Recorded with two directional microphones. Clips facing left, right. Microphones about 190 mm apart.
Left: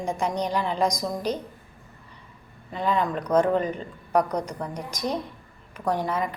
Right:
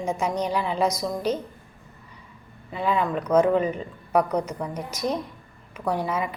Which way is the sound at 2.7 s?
5° right (ahead or behind).